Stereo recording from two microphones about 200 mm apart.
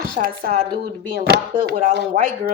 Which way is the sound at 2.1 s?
45° right (ahead or behind).